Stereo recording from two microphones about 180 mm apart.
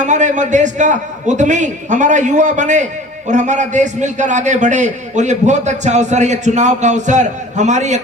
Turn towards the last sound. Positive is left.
turn(degrees=-40)  # may be behind; listen again after turning